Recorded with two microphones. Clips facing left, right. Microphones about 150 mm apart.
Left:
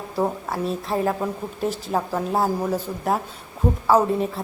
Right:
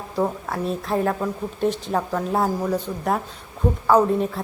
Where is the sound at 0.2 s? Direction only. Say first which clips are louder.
Even; centre (ahead or behind).